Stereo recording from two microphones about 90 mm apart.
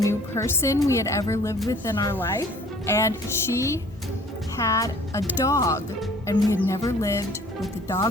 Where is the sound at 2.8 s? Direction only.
30° left (ahead or behind).